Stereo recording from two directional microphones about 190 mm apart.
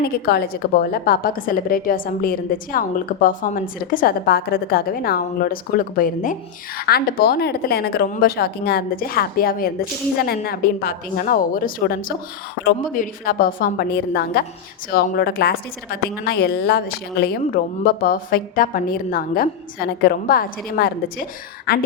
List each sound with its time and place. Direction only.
0.3 s a woman's voice: 55° left (ahead or behind)